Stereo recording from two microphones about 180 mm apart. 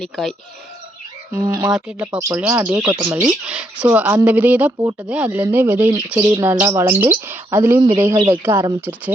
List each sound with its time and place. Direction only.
0.0 s speech: centre (ahead or behind)
1.3 s speech: 15° right (ahead or behind)
1.7 s speech: 5° right (ahead or behind)
2.0 s speech: 20° right (ahead or behind)